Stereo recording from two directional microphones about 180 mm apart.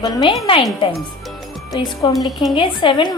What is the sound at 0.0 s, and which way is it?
Speech, 25° left (ahead or behind).